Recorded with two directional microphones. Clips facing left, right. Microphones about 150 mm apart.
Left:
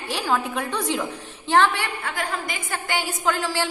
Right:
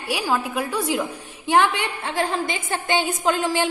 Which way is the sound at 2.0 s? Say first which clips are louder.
Right 5 dB; 25° right (ahead or behind).